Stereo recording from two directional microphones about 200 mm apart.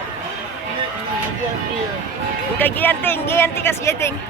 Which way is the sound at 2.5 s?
10° left (ahead or behind).